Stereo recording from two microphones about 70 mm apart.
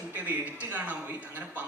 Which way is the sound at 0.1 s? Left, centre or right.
Right.